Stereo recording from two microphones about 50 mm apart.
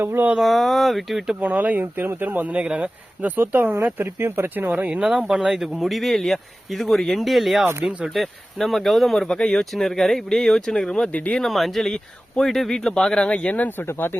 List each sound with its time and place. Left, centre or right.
0.0 s speech: right
0.3 s speech: centre
1.4 s speech: right
1.8 s speech: right
2.5 s speech: right
4.0 s speech: right
4.8 s speech: right
5.0 s speech: centre
9.2 s speech: centre
11.1 s speech: left
11.4 s speech: centre; by 13.7 s left
13.7 s speech: left